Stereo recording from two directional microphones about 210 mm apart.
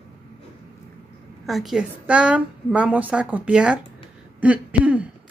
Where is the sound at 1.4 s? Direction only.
Centre (ahead or behind).